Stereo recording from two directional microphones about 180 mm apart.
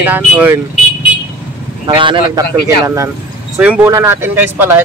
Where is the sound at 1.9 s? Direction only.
25° right (ahead or behind).